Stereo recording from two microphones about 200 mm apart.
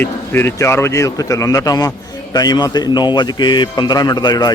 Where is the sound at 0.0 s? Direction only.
10° left (ahead or behind).